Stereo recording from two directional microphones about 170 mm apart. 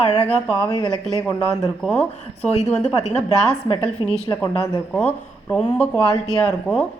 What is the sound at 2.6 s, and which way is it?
Speech, 40° left (ahead or behind).